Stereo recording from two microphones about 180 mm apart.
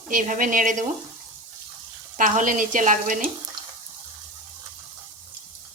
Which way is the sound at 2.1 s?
45° right (ahead or behind).